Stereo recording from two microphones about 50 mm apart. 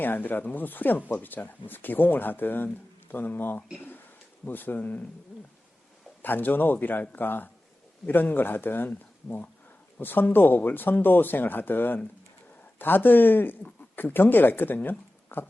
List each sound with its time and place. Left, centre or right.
0.0 s speech: left
6.2 s speech: left